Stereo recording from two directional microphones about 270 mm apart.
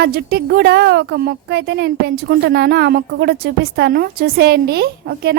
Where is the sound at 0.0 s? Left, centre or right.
Right.